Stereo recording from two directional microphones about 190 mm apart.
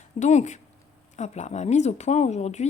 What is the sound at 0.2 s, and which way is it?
A woman's voice, 40° left (ahead or behind).